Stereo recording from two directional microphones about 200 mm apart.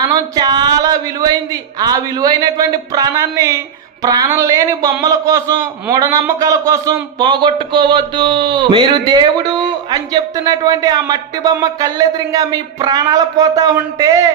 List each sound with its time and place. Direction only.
0.1 s a man's voice: 20° right (ahead or behind)